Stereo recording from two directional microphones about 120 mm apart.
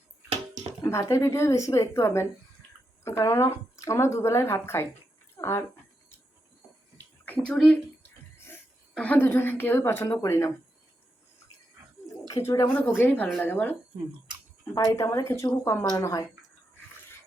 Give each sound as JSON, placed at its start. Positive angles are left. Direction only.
{"t": 0.9, "sound": "speech", "side_deg": 25}
{"t": 6.9, "sound": "bathtub", "side_deg": 10}
{"t": 12.3, "sound": "speech", "side_deg": 25}